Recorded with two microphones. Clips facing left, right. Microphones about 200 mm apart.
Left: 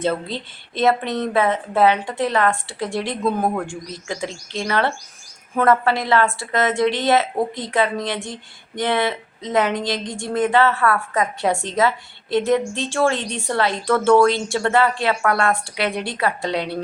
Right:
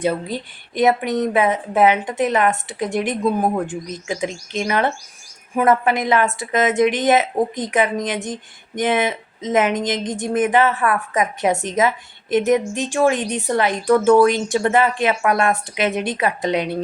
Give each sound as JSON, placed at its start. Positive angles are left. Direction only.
{"t": 0.0, "sound": "a woman's voice", "side_deg": -10}